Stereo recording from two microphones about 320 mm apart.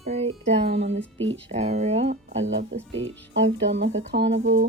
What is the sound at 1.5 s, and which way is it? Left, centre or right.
Speech, right.